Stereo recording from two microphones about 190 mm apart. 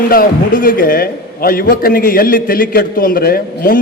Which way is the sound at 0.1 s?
50° left (ahead or behind).